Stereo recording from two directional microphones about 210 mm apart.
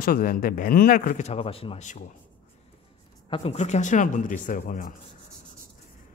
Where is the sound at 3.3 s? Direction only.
30° left (ahead or behind).